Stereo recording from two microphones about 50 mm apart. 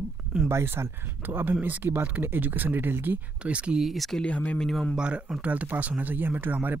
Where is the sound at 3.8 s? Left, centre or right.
Centre.